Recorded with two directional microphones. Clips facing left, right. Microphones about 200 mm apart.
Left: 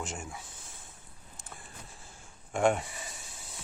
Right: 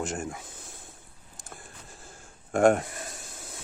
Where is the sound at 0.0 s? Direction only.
60° right (ahead or behind).